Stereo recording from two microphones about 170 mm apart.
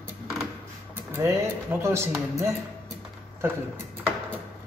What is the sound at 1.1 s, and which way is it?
Speech, 15° right (ahead or behind).